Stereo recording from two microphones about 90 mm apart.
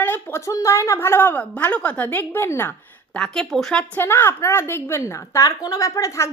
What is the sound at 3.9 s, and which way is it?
A woman's voice, 25° left (ahead or behind).